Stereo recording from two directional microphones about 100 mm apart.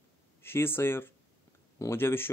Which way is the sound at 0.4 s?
25° left (ahead or behind).